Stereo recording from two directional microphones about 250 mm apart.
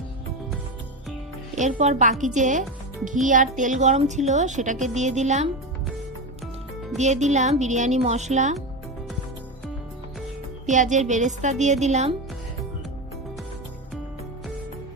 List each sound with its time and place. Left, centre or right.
1.5 s a woman's voice: right
6.9 s a woman's voice: right
10.7 s a woman's voice: right